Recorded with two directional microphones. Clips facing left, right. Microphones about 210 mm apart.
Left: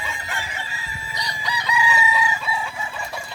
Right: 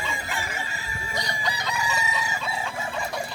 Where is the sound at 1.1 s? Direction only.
50° right (ahead or behind).